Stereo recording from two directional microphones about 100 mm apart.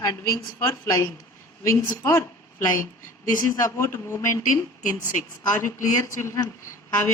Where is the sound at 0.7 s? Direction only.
30° left (ahead or behind).